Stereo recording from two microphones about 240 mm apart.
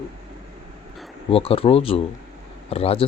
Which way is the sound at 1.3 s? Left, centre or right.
Left.